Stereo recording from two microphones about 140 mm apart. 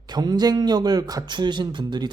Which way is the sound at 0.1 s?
30° right (ahead or behind).